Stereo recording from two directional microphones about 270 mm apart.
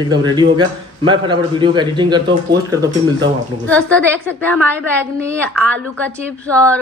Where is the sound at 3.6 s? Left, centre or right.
Centre.